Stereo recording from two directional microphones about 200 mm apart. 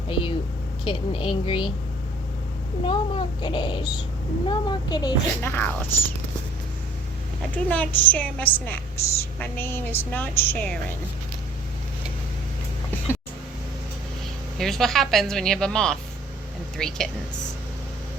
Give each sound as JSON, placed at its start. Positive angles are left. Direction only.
{"t": 0.1, "sound": "a sound", "side_deg": 25}
{"t": 0.9, "sound": "a child's voice", "side_deg": 25}
{"t": 2.8, "sound": "a child's voice", "side_deg": 25}
{"t": 5.5, "sound": "a woman's voice", "side_deg": 10}
{"t": 7.5, "sound": "a woman's voice", "side_deg": 10}
{"t": 14.6, "sound": "speech", "side_deg": 0}